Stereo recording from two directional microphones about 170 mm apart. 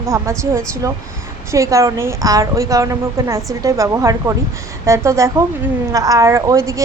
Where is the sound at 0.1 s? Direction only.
15° right (ahead or behind).